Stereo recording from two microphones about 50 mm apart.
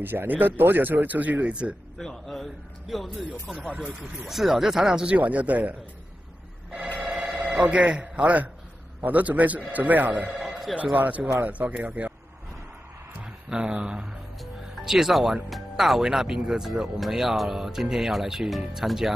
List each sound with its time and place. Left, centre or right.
0.0 s a man's voice: right
2.0 s a man's voice: centre
3.6 s speech: centre
4.3 s speech: centre
5.1 s speech: right
7.3 s telephone bell ringing: right
7.6 s a man's voice: right
10.2 s speech: centre
10.8 s a man's voice: right
13.2 s speech: centre
14.4 s music: centre
15.5 s a man's voice: centre